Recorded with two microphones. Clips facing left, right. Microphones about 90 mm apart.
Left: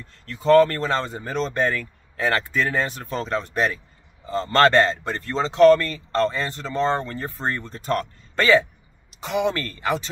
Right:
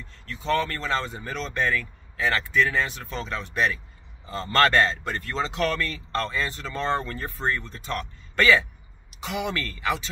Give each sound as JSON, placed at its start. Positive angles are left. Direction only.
{"t": 0.2, "sound": "speech", "side_deg": 45}